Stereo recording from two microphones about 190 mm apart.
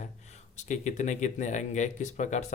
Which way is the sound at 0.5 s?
40° left (ahead or behind).